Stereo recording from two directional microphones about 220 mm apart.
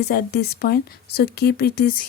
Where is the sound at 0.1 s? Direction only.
45° left (ahead or behind).